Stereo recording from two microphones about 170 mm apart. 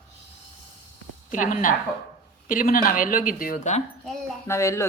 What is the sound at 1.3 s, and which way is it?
A woman's voice, 50° left (ahead or behind).